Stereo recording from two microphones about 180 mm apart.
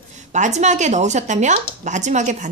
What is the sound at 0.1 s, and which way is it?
Speech, 40° right (ahead or behind).